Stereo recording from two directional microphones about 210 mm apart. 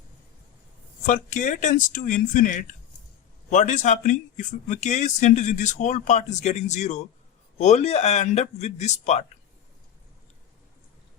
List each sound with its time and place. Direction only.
1.0 s speech: 35° left (ahead or behind)